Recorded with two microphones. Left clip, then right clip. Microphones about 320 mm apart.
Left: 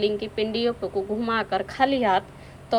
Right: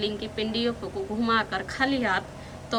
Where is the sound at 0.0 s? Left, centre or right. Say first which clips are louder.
Left 5 dB; centre.